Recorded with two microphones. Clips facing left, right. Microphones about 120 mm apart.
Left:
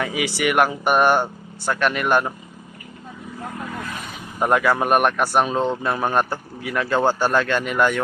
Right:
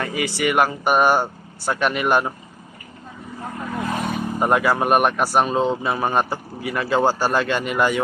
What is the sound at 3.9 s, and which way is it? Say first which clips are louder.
Vehicle: right 9 dB; 55° right (ahead or behind).